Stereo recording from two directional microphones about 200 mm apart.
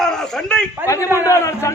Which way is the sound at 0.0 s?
5° left (ahead or behind).